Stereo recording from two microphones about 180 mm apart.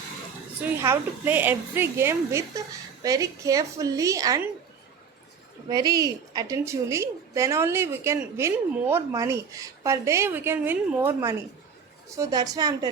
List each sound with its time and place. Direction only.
0.8 s a woman's voice: 15° right (ahead or behind)
5.6 s a woman's voice: 20° right (ahead or behind)